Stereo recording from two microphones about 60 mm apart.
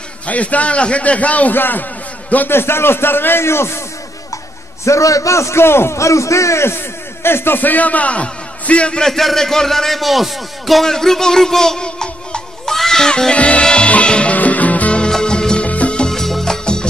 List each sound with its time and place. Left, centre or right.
0.3 s a man's voice: left
4.8 s a man's voice: left; by 9.1 s centre
9.1 s speech: centre; by 15.0 s left
15.0 s music: centre